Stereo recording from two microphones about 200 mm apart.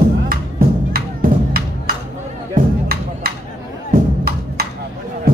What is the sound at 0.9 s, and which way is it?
Music, 50° right (ahead or behind).